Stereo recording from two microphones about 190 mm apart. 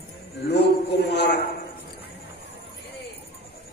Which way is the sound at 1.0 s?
60° left (ahead or behind).